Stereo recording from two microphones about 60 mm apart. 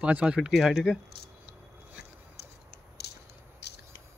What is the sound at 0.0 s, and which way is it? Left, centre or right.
Speech, centre.